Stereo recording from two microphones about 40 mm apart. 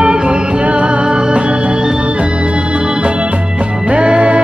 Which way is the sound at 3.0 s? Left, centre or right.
Right.